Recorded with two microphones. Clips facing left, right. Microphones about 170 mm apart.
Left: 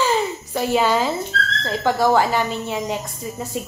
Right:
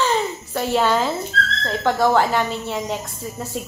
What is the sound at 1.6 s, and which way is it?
Speech, 5° left (ahead or behind).